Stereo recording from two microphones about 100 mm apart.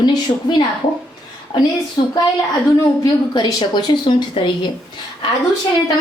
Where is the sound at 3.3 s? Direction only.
45° left (ahead or behind).